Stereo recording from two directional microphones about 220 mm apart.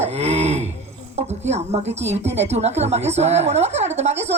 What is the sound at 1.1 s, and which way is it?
Speech, 30° right (ahead or behind).